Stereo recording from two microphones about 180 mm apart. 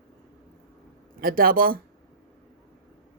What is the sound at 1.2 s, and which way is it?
Speech, 55° right (ahead or behind).